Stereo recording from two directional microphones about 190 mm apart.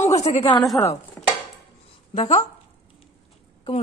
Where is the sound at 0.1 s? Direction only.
35° left (ahead or behind).